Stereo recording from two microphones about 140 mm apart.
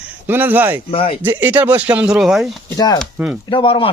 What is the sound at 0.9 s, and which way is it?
Speech, 45° left (ahead or behind).